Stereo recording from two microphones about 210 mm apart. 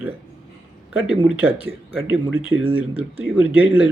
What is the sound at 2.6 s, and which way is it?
Speech, 25° right (ahead or behind).